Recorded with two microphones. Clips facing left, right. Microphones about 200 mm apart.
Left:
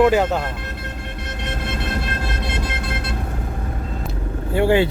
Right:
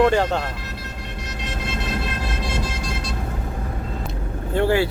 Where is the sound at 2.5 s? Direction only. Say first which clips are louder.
Left 1 dB; 60° left (ahead or behind).